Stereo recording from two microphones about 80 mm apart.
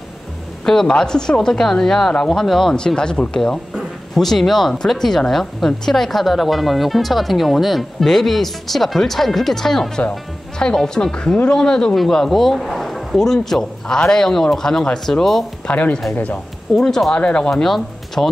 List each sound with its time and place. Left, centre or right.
0.7 s speech: centre
15.6 s speech: centre